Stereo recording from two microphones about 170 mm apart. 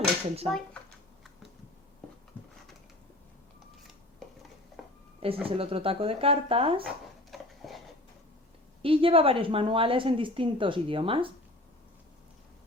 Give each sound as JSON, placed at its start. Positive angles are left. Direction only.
{"t": 0.5, "sound": "typing", "side_deg": 5}
{"t": 5.2, "sound": "a woman's voice", "side_deg": -35}
{"t": 7.3, "sound": "a sound", "side_deg": 0}
{"t": 8.8, "sound": "a woman's voice", "side_deg": -30}